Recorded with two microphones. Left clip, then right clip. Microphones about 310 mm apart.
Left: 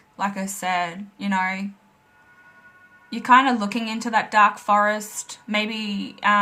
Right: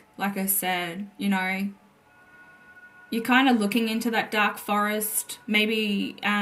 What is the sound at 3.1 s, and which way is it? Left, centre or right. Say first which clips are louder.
Speech: left 5 dB; centre.